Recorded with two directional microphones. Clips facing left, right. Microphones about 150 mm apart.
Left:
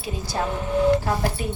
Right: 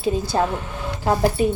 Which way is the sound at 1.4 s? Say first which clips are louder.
Right 9 dB; 20° right (ahead or behind).